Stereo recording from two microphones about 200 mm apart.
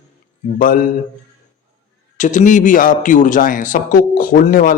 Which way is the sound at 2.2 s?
40° left (ahead or behind).